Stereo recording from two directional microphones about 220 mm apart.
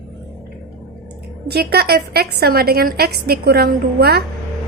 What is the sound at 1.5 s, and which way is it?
A woman's voice, 45° right (ahead or behind).